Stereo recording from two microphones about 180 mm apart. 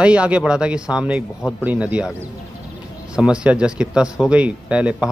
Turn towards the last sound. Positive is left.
turn(degrees=-5)  # may be behind; listen again after turning